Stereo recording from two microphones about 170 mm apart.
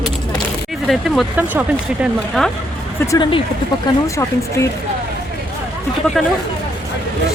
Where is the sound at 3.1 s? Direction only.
30° left (ahead or behind).